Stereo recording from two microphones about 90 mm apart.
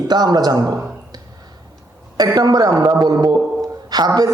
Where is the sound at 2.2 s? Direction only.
45° right (ahead or behind).